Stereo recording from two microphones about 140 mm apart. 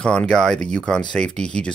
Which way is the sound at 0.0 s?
5° left (ahead or behind).